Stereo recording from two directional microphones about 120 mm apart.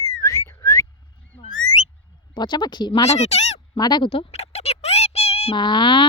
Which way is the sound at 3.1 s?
65° left (ahead or behind).